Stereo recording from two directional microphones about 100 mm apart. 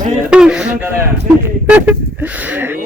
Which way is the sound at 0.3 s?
10° right (ahead or behind).